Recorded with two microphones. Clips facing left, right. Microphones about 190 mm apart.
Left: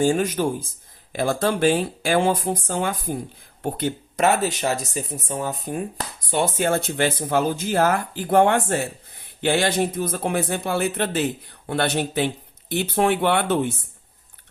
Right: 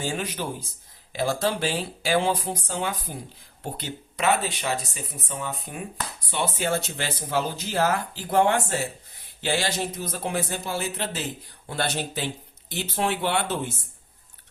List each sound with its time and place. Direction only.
0.0 s speech: 45° left (ahead or behind)